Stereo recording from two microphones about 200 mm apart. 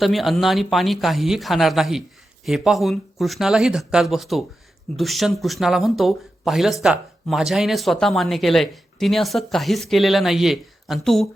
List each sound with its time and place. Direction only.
0.0 s speech: centre (ahead or behind)